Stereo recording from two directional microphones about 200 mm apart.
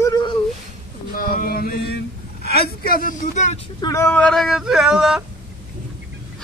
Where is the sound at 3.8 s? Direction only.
15° left (ahead or behind); by 5.2 s 5° right (ahead or behind).